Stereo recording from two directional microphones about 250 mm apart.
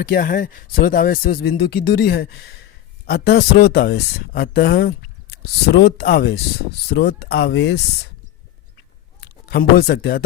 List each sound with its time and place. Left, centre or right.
0.0 s speech: left
9.2 s speech: left